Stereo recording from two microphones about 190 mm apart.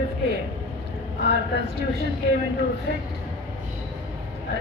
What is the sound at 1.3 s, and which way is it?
Speech, 60° right (ahead or behind).